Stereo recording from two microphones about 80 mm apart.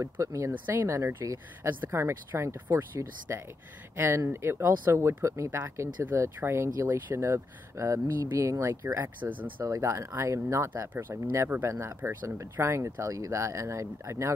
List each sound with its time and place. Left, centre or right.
0.0 s speech: right
1.7 s speech: right
2.0 s speech: right
9.2 s speech: centre
9.7 s speech: right
12.0 s speech: right
12.4 s speech: right